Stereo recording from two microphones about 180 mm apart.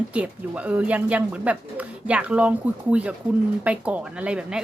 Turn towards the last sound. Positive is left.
turn(degrees=-5)  # may be behind; listen again after turning